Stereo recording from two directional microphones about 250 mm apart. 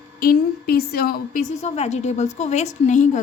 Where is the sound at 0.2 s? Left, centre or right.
Left.